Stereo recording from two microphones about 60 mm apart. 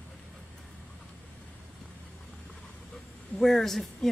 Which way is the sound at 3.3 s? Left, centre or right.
Centre.